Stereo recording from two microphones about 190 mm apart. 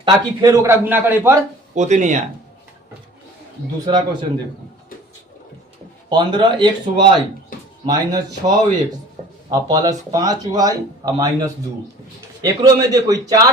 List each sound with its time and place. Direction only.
0.0 s a man's voice: 15° right (ahead or behind)
1.7 s speech: 40° right (ahead or behind)
3.8 s speech: 25° right (ahead or behind)
6.1 s speech: 25° right (ahead or behind)